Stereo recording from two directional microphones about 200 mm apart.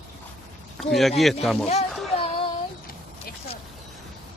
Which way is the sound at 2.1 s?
25° left (ahead or behind).